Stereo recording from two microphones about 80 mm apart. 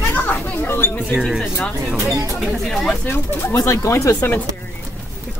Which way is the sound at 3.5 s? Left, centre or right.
Left.